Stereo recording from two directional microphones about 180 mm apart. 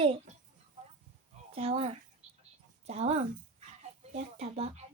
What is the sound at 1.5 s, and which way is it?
A child's voice, 35° right (ahead or behind).